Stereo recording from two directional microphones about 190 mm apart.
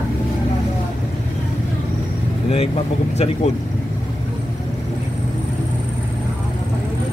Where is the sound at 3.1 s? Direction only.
35° left (ahead or behind).